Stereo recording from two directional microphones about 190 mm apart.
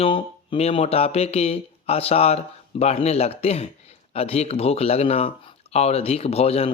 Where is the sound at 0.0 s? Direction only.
30° left (ahead or behind).